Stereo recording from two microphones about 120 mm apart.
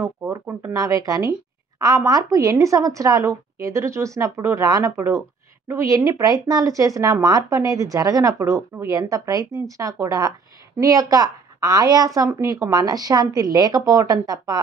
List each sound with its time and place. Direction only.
0.0 s speech: 20° right (ahead or behind)